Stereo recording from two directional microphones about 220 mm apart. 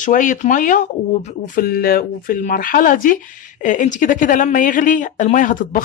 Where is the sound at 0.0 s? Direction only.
35° left (ahead or behind).